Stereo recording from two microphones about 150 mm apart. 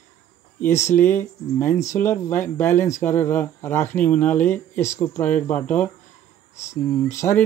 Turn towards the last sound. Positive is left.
turn(degrees=20)  # may be behind; listen again after turning